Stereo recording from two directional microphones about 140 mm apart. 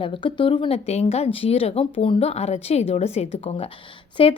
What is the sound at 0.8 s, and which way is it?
A woman's voice, 50° left (ahead or behind).